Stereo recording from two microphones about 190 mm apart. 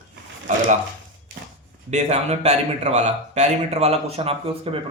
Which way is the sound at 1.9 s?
35° right (ahead or behind).